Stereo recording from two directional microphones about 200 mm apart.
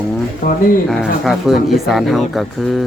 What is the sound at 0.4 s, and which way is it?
Speech, 40° left (ahead or behind).